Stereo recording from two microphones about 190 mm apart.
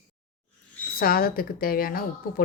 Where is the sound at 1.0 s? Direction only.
50° left (ahead or behind).